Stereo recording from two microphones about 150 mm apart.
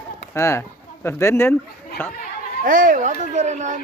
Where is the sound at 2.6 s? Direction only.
60° right (ahead or behind).